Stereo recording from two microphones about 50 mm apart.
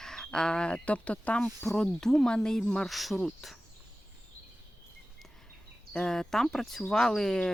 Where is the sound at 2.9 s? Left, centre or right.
Centre.